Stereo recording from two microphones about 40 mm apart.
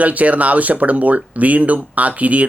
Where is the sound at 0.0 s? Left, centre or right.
Right.